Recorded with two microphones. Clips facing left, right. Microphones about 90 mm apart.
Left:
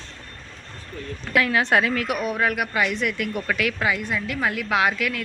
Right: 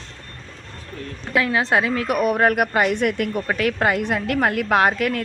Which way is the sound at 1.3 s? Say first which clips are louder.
Right 1 dB; 25° right (ahead or behind).